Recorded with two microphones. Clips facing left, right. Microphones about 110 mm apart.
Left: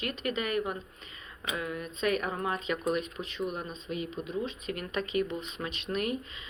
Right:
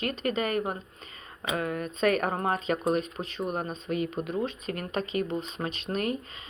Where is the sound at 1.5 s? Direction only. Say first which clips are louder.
Right 5 dB; 50° right (ahead or behind).